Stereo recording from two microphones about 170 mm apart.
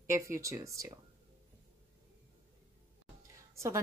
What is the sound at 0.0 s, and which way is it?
Speech, 15° right (ahead or behind).